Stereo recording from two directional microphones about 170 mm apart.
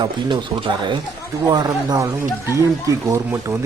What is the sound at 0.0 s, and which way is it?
Speech, 25° right (ahead or behind).